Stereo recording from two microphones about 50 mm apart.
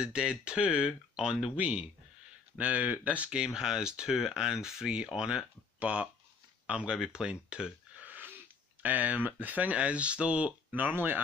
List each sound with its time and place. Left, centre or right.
0.0 s speech: centre
5.8 s speech: right
8.0 s wheeze: right
8.8 s speech: right